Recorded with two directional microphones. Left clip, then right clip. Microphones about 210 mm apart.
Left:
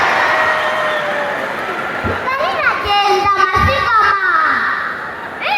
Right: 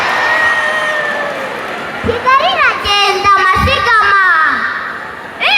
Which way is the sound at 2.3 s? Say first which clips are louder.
Right 7 dB; 50° right (ahead or behind).